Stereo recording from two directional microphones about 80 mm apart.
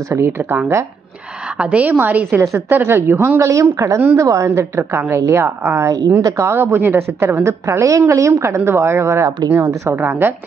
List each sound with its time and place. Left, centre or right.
0.1 s a woman's voice: right
1.6 s a woman's voice: centre